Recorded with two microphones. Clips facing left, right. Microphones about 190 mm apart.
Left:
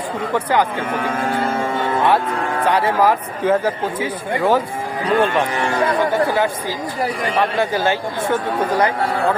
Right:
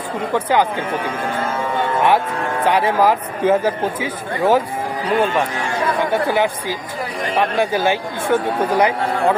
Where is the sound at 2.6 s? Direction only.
15° right (ahead or behind).